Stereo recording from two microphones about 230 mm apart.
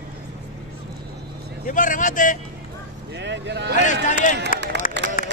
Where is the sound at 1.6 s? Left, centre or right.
Left.